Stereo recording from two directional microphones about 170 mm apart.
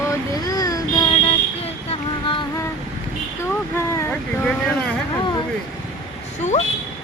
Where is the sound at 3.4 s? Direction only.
15° left (ahead or behind).